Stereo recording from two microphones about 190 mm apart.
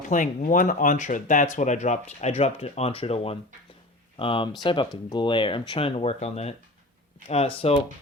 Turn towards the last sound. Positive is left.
turn(degrees=30)  # may be behind; listen again after turning